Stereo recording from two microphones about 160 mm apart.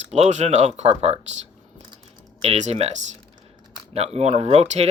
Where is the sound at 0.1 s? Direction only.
45° right (ahead or behind).